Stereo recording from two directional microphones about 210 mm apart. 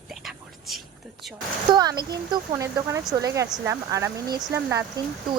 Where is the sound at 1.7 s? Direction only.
20° right (ahead or behind).